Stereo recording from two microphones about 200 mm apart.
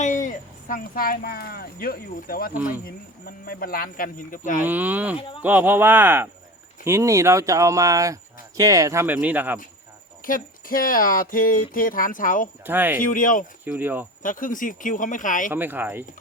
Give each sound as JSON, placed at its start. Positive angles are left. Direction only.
{"t": 0.0, "sound": "speech", "side_deg": 40}
{"t": 4.6, "sound": "speech", "side_deg": -10}
{"t": 10.2, "sound": "speech", "side_deg": 45}
{"t": 12.6, "sound": "speech", "side_deg": -10}
{"t": 13.0, "sound": "speech", "side_deg": 40}
{"t": 13.7, "sound": "speech", "side_deg": -10}
{"t": 14.2, "sound": "speech", "side_deg": 40}
{"t": 15.5, "sound": "speech", "side_deg": -10}